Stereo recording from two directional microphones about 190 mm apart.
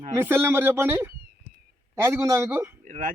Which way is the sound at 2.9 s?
45° right (ahead or behind).